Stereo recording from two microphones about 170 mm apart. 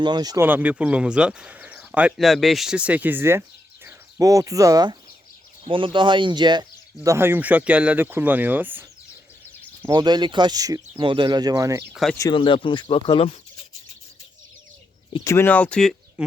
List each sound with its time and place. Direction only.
0.0 s speech: 25° right (ahead or behind)
0.4 s speech: 10° right (ahead or behind)
9.9 s speech: 25° right (ahead or behind)
12.3 s speech: 30° left (ahead or behind)
15.2 s speech: 15° left (ahead or behind)